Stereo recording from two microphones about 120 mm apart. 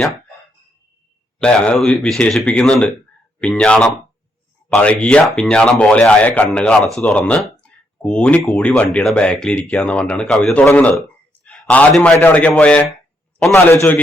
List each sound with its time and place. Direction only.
1.4 s a man's voice: 10° left (ahead or behind)